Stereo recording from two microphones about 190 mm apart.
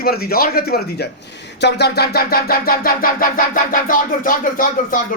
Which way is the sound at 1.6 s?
60° left (ahead or behind).